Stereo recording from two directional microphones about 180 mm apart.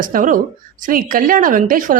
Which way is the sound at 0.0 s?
50° right (ahead or behind).